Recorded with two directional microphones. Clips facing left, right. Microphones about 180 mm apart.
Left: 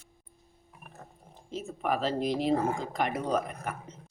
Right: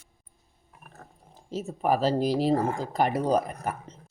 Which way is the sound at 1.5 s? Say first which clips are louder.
Right 5 dB; 40° right (ahead or behind).